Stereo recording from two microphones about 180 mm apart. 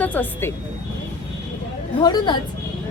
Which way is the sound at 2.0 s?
25° left (ahead or behind).